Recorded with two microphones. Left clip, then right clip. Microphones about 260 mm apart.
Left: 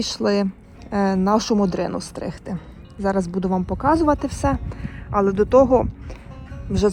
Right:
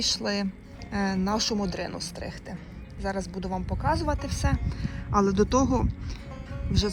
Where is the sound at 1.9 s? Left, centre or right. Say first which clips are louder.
Left 7 dB; left.